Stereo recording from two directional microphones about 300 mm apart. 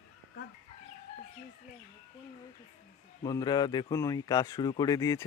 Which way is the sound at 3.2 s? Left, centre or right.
Centre.